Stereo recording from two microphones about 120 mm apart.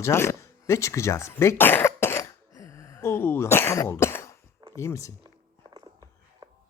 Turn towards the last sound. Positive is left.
turn(degrees=25)  # may be behind; listen again after turning